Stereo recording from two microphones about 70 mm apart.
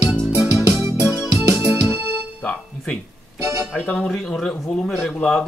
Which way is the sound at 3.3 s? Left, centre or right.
Right.